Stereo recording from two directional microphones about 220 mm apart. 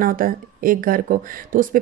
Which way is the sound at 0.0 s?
40° right (ahead or behind).